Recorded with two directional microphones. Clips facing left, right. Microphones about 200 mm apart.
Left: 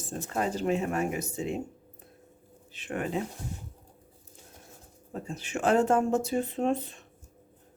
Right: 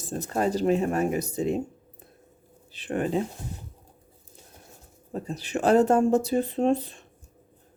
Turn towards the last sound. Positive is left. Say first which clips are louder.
# right 4 dB
turn(degrees=-35)  # may be behind; listen again after turning